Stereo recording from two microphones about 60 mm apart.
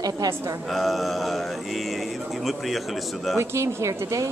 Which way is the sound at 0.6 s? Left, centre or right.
Centre.